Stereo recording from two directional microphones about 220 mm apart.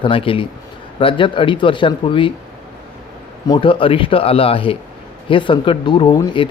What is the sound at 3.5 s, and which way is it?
Speech, 25° left (ahead or behind).